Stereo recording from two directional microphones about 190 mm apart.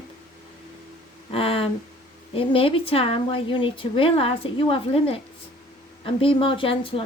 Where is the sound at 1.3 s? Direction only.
30° left (ahead or behind).